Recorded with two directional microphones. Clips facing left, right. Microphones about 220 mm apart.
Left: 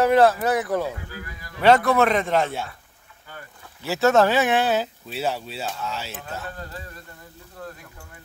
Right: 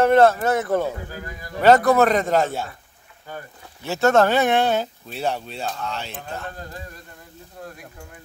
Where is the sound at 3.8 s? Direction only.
Centre (ahead or behind).